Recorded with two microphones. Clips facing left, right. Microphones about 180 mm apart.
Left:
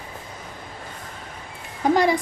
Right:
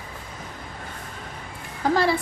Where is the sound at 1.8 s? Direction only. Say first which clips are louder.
Left 3 dB; 20° left (ahead or behind).